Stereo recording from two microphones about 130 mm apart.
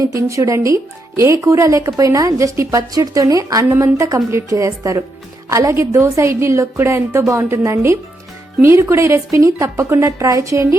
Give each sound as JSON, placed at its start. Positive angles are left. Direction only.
{"t": 0.0, "sound": "speech", "side_deg": -25}